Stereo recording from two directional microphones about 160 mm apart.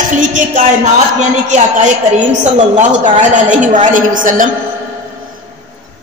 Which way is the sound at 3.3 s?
50° right (ahead or behind).